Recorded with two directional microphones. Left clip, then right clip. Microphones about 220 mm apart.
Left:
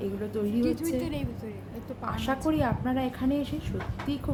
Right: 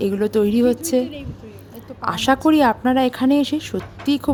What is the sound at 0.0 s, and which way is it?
Speech, 50° right (ahead or behind).